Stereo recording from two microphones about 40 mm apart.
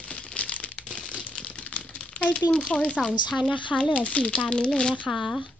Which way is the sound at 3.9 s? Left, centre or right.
Left.